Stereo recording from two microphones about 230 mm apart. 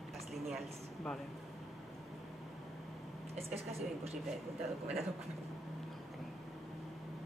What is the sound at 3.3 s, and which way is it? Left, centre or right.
Speech, right.